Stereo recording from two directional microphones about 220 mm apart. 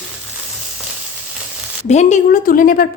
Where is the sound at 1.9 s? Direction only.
30° left (ahead or behind).